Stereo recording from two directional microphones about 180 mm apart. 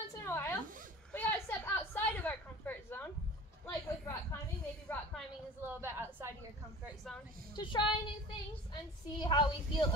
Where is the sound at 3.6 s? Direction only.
20° left (ahead or behind).